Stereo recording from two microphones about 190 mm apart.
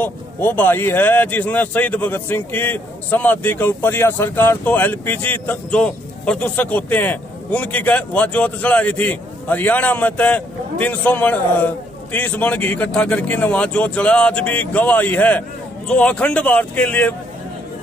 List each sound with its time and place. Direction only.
0.0 s speech: 10° left (ahead or behind)